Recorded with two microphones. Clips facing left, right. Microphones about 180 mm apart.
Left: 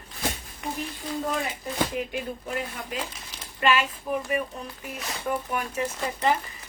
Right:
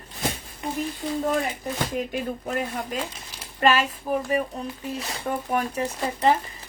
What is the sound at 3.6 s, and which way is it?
Speech, 40° right (ahead or behind).